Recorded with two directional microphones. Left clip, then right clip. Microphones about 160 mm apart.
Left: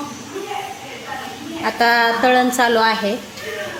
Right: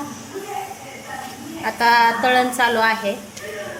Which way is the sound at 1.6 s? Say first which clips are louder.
Even; 50° left (ahead or behind).